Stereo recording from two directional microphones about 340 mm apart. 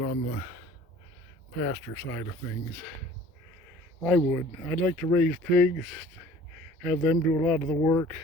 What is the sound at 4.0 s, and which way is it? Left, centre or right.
Speech, centre.